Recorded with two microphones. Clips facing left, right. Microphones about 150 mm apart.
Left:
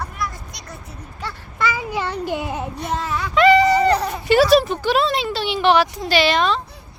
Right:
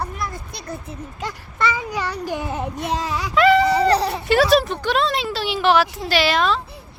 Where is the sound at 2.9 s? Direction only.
10° right (ahead or behind).